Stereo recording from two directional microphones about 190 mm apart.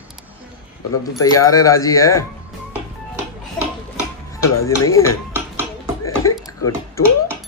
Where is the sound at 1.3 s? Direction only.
15° left (ahead or behind).